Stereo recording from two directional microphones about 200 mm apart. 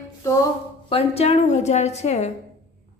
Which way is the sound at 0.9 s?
30° left (ahead or behind).